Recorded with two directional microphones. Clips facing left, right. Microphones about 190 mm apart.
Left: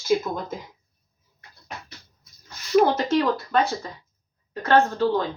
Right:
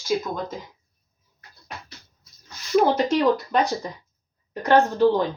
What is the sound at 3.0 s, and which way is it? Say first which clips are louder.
Speech: right 2 dB; 15° right (ahead or behind).